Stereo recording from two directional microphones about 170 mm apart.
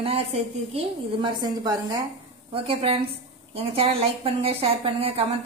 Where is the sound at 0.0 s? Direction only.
35° right (ahead or behind).